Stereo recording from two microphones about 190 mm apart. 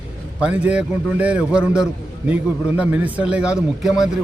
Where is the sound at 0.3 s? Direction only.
5° right (ahead or behind).